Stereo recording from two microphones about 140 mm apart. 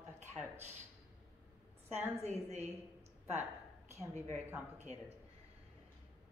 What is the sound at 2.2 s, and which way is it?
Speech, 50° right (ahead or behind).